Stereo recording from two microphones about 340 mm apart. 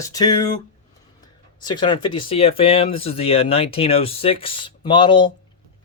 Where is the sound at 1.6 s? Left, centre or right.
Centre.